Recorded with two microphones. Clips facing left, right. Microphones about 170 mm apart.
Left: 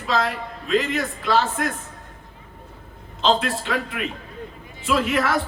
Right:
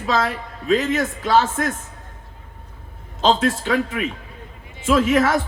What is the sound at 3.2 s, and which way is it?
A man's voice, 45° right (ahead or behind).